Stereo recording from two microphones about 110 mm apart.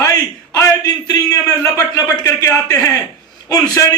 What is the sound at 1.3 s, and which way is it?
A man's voice, 30° left (ahead or behind).